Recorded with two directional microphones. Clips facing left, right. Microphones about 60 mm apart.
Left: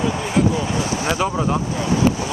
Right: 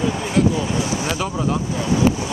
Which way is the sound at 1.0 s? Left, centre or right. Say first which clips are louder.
Left 2 dB; left.